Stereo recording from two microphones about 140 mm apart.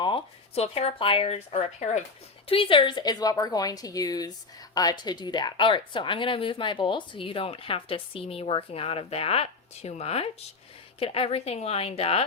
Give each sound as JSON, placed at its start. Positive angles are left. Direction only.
{"t": 0.0, "sound": "speech", "side_deg": 40}
{"t": 2.5, "sound": "a woman's voice", "side_deg": 40}